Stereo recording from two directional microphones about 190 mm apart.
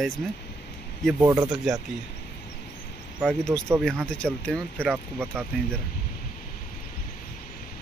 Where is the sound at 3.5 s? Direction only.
10° right (ahead or behind).